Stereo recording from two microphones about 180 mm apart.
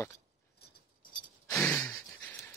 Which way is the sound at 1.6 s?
10° left (ahead or behind).